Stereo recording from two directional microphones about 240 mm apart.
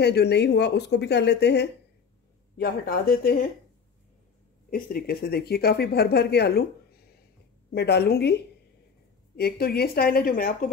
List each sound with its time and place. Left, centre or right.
0.0 s speech: left
4.6 s speech: left
7.7 s speech: left